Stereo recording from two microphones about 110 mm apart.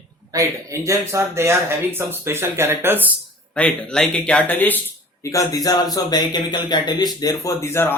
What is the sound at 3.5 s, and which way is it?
Speech, 10° left (ahead or behind).